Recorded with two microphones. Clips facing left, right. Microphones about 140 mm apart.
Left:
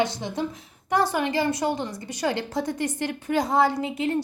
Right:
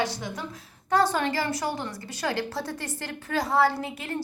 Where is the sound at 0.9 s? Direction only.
15° left (ahead or behind).